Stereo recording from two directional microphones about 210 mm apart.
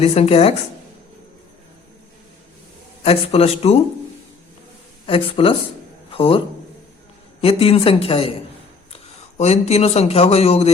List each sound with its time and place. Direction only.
0.0 s a man's voice: 30° left (ahead or behind)
3.0 s a man's voice: 30° left (ahead or behind)
5.0 s a man's voice: 25° left (ahead or behind)
7.4 s a man's voice: 25° left (ahead or behind)
9.4 s a man's voice: 30° left (ahead or behind)